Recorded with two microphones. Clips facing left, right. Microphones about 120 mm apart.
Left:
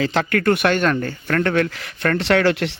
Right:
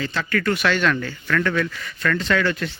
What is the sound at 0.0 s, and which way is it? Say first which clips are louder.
Speech: left 5 dB; 85° left.